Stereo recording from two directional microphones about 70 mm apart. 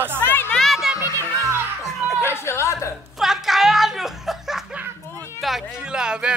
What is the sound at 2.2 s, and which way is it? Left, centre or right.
Speech, left.